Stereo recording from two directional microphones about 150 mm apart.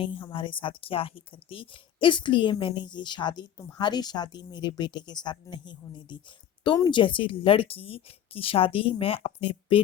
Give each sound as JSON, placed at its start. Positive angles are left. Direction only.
{"t": 0.0, "sound": "speech", "side_deg": 35}